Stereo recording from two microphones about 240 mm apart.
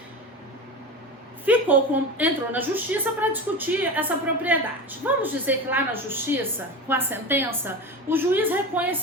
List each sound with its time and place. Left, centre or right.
1.5 s a woman's voice: centre